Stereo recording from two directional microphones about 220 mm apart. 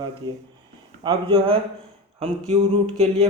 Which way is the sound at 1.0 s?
25° right (ahead or behind).